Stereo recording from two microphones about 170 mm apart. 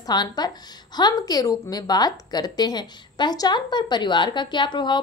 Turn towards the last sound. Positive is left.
turn(degrees=25)  # may be behind; listen again after turning